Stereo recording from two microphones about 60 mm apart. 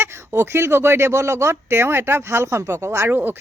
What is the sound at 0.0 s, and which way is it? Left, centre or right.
Speech, right.